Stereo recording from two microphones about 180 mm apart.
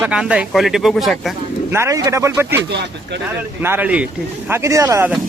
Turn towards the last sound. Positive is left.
turn(degrees=-15)  # may be behind; listen again after turning